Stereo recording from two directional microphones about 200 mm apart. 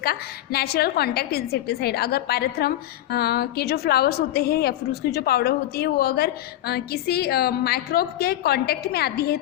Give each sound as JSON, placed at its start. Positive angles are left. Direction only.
{"t": 0.0, "sound": "a woman's voice", "side_deg": 50}